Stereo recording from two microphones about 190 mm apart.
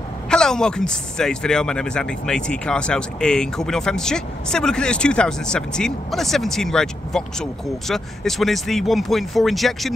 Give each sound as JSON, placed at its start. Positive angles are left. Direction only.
{"t": 0.3, "sound": "speech", "side_deg": 5}